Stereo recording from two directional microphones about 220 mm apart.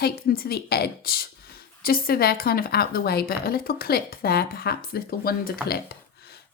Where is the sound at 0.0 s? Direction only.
45° left (ahead or behind).